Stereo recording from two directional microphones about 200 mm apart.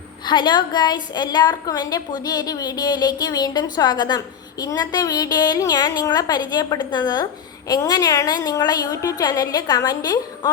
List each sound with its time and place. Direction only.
0.3 s a woman's voice: 20° left (ahead or behind)